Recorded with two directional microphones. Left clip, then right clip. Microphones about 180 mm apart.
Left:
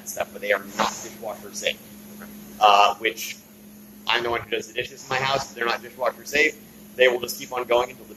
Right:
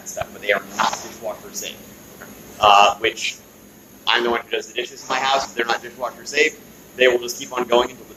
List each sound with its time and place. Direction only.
0.0 s cricket: 25° left (ahead or behind)
1.2 s a man's voice: 25° left (ahead or behind)
2.6 s a man's voice: 25° left (ahead or behind)